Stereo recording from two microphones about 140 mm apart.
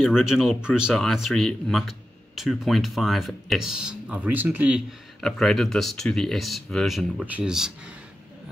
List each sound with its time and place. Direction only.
0.0 s speech: centre (ahead or behind)
5.2 s speech: 5° left (ahead or behind)